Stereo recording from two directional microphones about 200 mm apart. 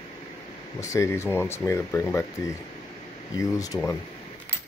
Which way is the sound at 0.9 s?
15° left (ahead or behind).